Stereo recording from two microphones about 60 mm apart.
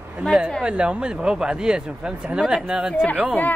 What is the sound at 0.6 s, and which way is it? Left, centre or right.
Speech, centre.